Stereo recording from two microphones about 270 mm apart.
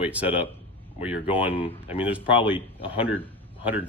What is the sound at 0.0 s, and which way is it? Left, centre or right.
A man's voice, centre.